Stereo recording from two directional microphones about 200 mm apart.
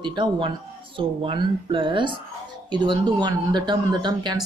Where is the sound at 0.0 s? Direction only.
20° right (ahead or behind).